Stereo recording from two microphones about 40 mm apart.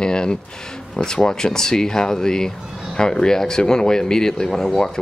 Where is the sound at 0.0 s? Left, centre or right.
Left.